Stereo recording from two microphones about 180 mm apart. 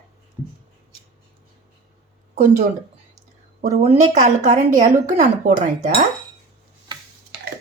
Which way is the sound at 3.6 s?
35° right (ahead or behind).